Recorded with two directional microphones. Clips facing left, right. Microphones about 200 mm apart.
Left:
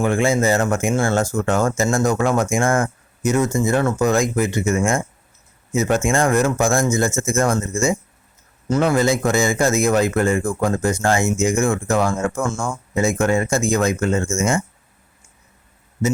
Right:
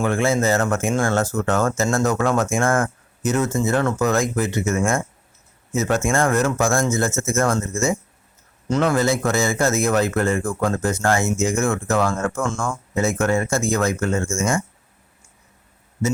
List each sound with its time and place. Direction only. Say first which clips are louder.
0.0 s a man's voice: left 2 dB; 15° left (ahead or behind)